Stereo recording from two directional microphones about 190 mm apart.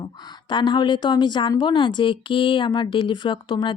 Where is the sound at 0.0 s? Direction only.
25° left (ahead or behind).